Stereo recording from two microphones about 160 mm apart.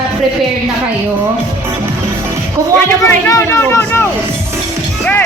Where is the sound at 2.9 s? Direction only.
15° left (ahead or behind).